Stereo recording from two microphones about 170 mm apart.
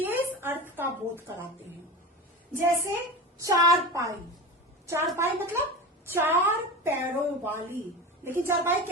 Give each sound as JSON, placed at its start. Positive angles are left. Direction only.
{"t": 0.0, "sound": "a sound", "side_deg": -10}
{"t": 2.5, "sound": "a woman's voice", "side_deg": -15}
{"t": 5.1, "sound": "a woman's voice", "side_deg": -15}